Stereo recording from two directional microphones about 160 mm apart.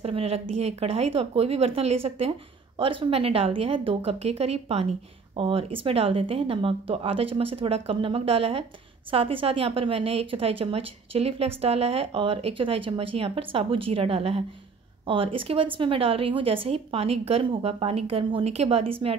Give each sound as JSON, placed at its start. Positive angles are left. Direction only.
{"t": 0.0, "sound": "a woman's voice", "side_deg": -40}